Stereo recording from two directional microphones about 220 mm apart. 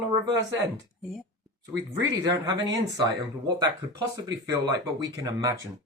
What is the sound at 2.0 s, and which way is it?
Speech, 15° right (ahead or behind).